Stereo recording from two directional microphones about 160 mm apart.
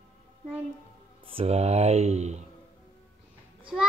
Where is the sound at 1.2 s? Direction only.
35° right (ahead or behind).